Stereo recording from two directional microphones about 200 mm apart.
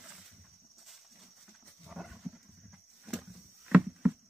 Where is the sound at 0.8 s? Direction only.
Centre (ahead or behind).